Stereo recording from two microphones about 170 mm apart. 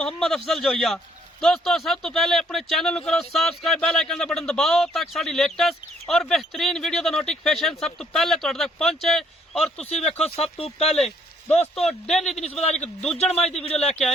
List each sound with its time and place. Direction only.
0.0 s speech: 5° left (ahead or behind)
10.2 s speech: 35° left (ahead or behind)
11.7 s speech: 5° left (ahead or behind)
12.4 s speech: 40° left (ahead or behind)
12.7 s speech: 5° left (ahead or behind)
13.6 s speech: 35° left (ahead or behind)